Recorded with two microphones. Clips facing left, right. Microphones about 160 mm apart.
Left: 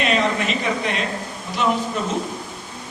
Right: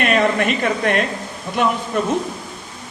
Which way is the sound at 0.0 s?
55° right (ahead or behind).